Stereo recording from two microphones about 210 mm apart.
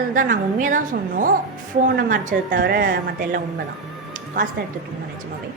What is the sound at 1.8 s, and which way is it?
A woman's voice, 40° right (ahead or behind).